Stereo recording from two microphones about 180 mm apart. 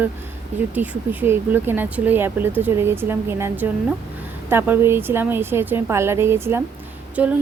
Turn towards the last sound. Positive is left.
turn(degrees=-10)  # may be behind; listen again after turning